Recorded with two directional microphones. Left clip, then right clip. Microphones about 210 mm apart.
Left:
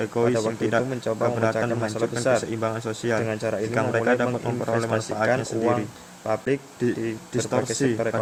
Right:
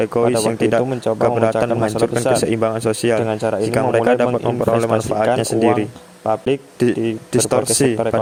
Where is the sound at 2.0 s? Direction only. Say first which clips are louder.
Right 4 dB; 30° right (ahead or behind).